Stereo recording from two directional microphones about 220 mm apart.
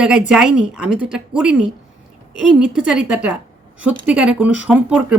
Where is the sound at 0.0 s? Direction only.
5° right (ahead or behind).